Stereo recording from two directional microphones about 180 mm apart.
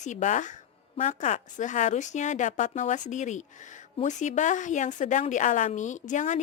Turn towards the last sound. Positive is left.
turn(degrees=45)  # may be behind; listen again after turning